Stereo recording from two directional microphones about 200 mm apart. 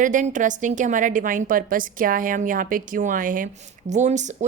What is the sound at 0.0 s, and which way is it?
Speech, 40° right (ahead or behind).